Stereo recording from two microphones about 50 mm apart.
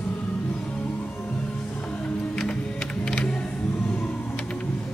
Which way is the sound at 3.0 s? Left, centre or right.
Centre.